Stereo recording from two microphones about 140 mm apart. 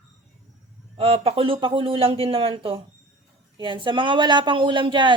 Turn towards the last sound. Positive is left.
turn(degrees=-35)  # may be behind; listen again after turning